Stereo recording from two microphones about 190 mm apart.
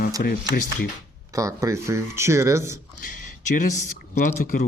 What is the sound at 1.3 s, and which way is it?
Speech, 15° right (ahead or behind).